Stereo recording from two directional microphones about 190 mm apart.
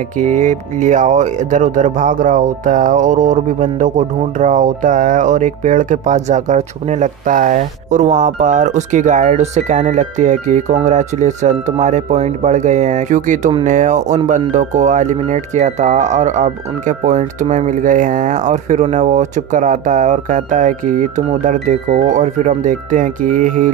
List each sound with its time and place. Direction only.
0.2 s speech: 40° right (ahead or behind)